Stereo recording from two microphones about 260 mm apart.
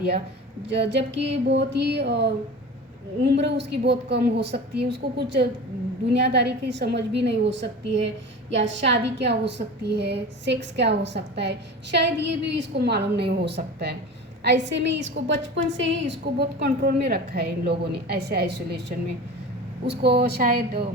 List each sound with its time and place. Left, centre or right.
0.7 s a woman's voice: right